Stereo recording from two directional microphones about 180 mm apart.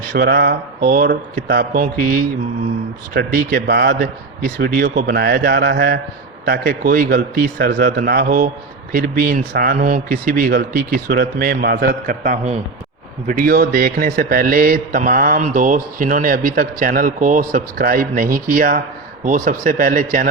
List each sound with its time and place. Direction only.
0.1 s a man's voice: 60° right (ahead or behind)